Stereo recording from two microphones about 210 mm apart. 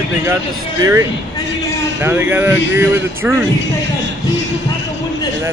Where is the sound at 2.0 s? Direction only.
10° right (ahead or behind).